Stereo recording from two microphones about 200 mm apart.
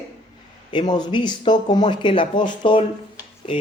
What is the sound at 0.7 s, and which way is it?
Speech, 20° left (ahead or behind).